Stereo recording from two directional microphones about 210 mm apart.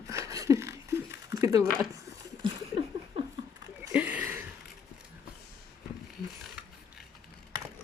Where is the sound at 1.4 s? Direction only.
15° right (ahead or behind).